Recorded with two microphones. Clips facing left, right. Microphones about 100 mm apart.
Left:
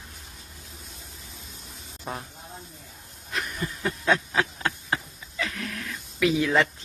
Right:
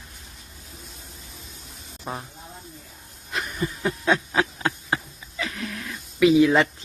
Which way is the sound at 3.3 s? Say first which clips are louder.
Right 3 dB; 15° right (ahead or behind).